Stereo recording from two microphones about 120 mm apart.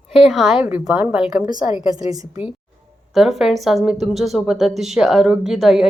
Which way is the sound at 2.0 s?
30° right (ahead or behind).